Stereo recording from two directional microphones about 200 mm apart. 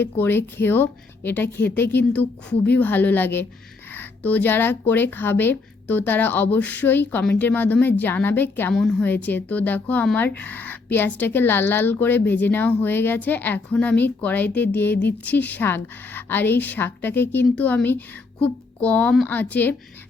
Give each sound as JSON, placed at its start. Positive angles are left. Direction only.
{"t": 0.0, "sound": "a woman's voice", "side_deg": 10}